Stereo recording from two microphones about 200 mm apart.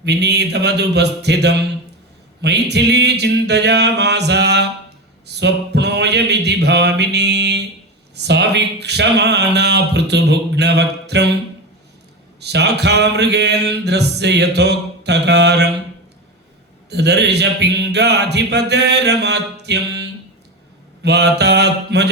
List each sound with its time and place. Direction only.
0.0 s mantra: 55° right (ahead or behind)
5.2 s a man's voice: 55° right (ahead or behind)
8.1 s mantra: 60° right (ahead or behind)
12.4 s mantra: 60° right (ahead or behind)
16.9 s mantra: 55° right (ahead or behind)